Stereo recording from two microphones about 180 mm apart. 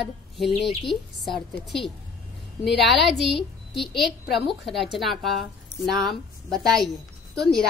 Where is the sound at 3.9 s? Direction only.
Centre (ahead or behind).